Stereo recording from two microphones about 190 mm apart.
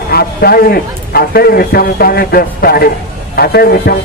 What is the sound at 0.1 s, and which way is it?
A man's voice, 55° left (ahead or behind).